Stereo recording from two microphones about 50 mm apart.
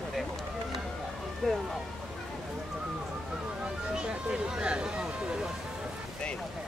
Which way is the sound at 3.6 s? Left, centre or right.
Centre.